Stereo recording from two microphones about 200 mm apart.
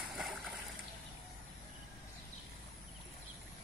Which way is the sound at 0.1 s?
Centre (ahead or behind).